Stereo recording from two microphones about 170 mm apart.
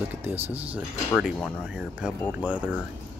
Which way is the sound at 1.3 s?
10° left (ahead or behind).